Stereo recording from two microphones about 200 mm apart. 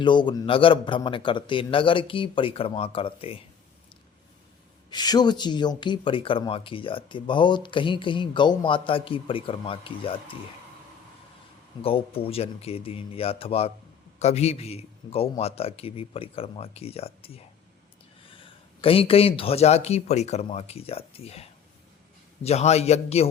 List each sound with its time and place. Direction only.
0.0 s speech: 25° left (ahead or behind)
4.9 s speech: 20° left (ahead or behind)
11.8 s speech: 30° left (ahead or behind)
22.4 s a man's voice: 30° left (ahead or behind)